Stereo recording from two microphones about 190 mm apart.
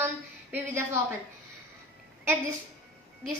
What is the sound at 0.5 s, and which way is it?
Speech, 10° right (ahead or behind).